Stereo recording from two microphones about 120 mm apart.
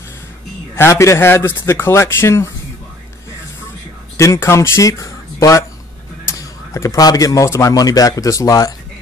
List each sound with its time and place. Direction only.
0.7 s speech: 20° left (ahead or behind)
4.2 s speech: 25° left (ahead or behind)